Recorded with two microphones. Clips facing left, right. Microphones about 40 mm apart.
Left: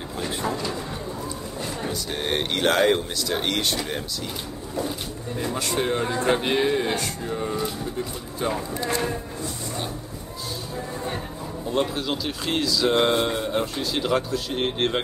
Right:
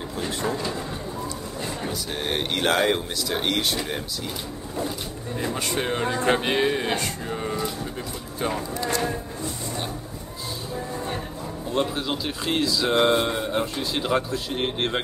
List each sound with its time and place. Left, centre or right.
0.3 s a sound: centre
1.8 s speech: centre
5.8 s speech: centre
8.7 s speech: left
11.7 s speech: centre